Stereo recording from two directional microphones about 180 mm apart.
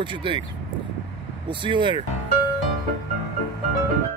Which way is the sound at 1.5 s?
25° right (ahead or behind).